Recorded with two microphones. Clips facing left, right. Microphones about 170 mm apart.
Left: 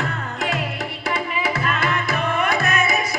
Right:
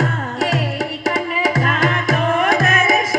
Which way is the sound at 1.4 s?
45° right (ahead or behind).